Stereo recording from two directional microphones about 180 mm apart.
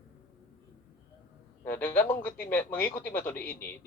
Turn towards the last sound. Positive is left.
turn(degrees=10)  # may be behind; listen again after turning